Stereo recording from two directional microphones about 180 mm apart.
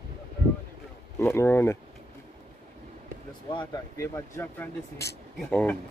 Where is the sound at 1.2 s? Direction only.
15° left (ahead or behind).